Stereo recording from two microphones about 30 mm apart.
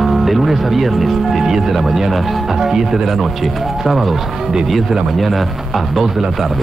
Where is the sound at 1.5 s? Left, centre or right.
Centre.